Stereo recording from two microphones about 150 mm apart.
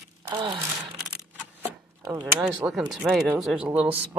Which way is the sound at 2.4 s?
5° right (ahead or behind).